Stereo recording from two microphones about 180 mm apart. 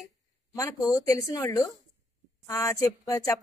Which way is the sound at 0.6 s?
20° left (ahead or behind).